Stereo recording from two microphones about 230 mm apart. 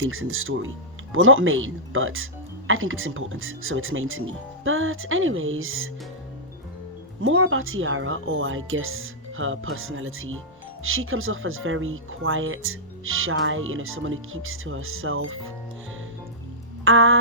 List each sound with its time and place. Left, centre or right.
0.0 s speech: right
7.2 s speech: right
16.8 s speech: right